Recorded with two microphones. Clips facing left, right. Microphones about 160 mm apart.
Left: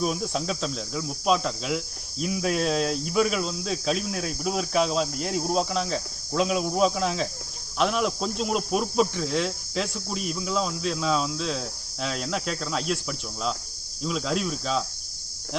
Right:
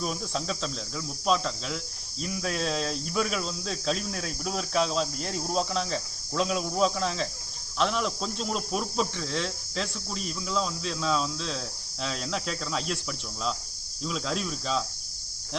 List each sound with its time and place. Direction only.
0.0 s speech: 10° left (ahead or behind)